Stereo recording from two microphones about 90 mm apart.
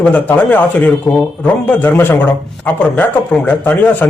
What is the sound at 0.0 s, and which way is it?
Speech, 15° left (ahead or behind).